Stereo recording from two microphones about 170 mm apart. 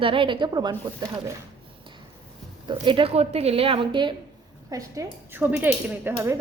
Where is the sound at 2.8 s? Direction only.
30° right (ahead or behind).